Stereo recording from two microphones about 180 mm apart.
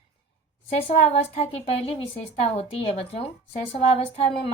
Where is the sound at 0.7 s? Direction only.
35° left (ahead or behind).